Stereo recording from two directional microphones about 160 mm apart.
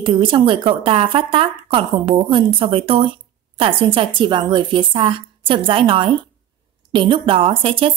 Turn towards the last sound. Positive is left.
turn(degrees=-35)  # may be behind; listen again after turning